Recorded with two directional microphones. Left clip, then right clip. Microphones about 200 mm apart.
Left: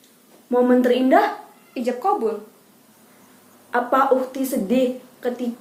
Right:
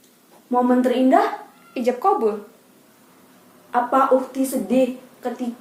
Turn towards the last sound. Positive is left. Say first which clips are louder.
# left 2 dB
turn(degrees=40)  # may be behind; listen again after turning